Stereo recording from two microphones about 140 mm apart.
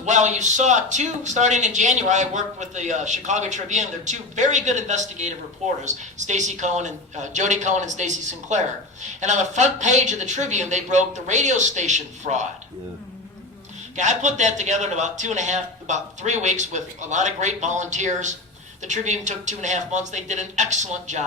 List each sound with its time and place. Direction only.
0.0 s speech: 55° right (ahead or behind)
13.9 s speech: 60° right (ahead or behind)